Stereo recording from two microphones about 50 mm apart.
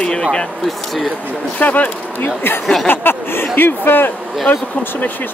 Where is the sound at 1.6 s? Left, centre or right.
Left.